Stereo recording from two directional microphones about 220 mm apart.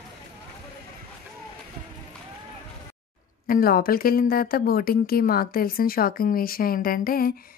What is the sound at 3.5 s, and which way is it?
Speech, 40° left (ahead or behind).